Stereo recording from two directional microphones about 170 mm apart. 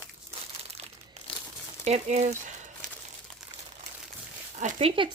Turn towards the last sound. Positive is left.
turn(degrees=-45)  # may be behind; listen again after turning